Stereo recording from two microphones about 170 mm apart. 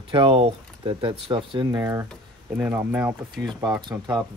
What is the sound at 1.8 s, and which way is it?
Speech, 15° right (ahead or behind).